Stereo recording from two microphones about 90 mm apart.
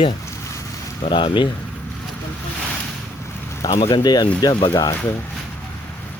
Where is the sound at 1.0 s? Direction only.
65° left (ahead or behind).